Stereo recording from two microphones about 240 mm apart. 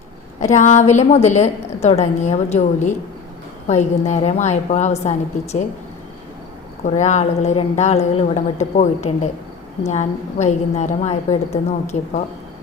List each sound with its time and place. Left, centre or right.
0.3 s a woman's voice: left
6.8 s a woman's voice: left